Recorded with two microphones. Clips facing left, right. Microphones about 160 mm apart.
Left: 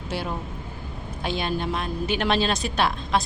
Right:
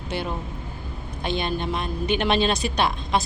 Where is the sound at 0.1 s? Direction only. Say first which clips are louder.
Right 1 dB; 5° left (ahead or behind).